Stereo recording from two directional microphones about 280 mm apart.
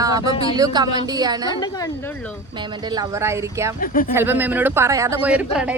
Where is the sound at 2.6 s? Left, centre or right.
Centre.